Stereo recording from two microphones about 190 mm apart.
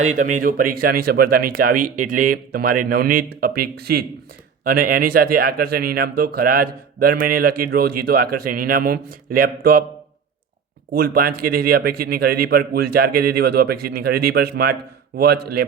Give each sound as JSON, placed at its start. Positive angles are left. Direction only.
{"t": 0.0, "sound": "a man's voice", "side_deg": -40}
{"t": 10.9, "sound": "a man's voice", "side_deg": -50}